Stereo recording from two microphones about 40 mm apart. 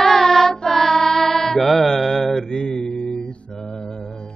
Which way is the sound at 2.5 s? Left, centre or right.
Centre.